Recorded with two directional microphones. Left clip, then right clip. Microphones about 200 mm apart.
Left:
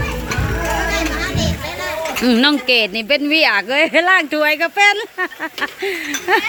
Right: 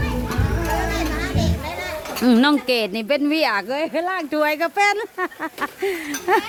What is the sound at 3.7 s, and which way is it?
Speech, 10° left (ahead or behind).